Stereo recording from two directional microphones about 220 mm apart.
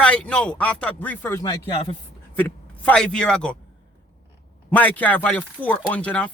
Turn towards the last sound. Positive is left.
turn(degrees=5)  # may be behind; listen again after turning